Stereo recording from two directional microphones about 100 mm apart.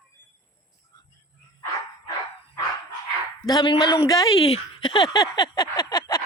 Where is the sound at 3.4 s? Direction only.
45° left (ahead or behind).